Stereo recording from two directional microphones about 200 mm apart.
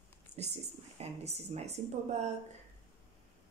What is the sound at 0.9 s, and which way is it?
Speech, 35° right (ahead or behind).